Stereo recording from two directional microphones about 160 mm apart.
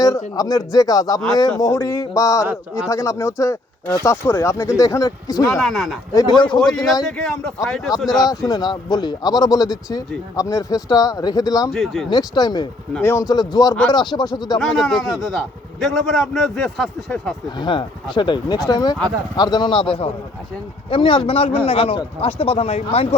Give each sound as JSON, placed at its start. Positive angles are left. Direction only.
{"t": 0.3, "sound": "a man's voice", "side_deg": 20}
{"t": 2.5, "sound": "a man's voice", "side_deg": -5}
{"t": 2.9, "sound": "a man's voice", "side_deg": 20}
{"t": 5.5, "sound": "a man's voice", "side_deg": 0}
{"t": 8.1, "sound": "a man's voice", "side_deg": 25}
{"t": 11.7, "sound": "a man's voice", "side_deg": 0}
{"t": 12.1, "sound": "a man's voice", "side_deg": 25}
{"t": 14.6, "sound": "a man's voice", "side_deg": 5}
{"t": 17.6, "sound": "a man's voice", "side_deg": 30}